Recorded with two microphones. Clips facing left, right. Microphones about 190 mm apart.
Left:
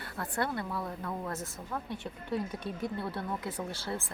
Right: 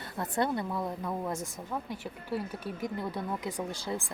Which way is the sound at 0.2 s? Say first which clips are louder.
Right 4 dB; 20° right (ahead or behind).